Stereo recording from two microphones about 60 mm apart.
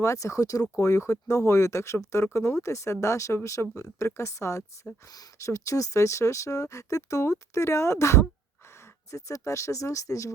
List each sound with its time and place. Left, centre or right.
0.0 s speech: left
0.8 s speech: left